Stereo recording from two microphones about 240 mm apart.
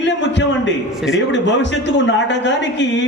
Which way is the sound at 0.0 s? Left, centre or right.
Left.